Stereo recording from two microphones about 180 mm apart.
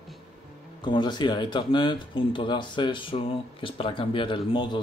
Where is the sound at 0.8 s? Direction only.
25° left (ahead or behind).